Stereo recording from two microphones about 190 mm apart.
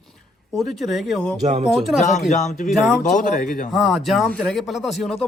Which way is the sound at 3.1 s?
50° left (ahead or behind).